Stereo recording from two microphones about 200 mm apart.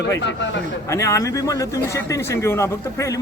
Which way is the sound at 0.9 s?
15° left (ahead or behind).